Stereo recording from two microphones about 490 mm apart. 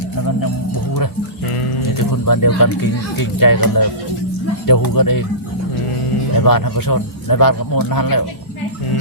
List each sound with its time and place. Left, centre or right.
2.2 s a man's voice: left
6.3 s a man's voice: left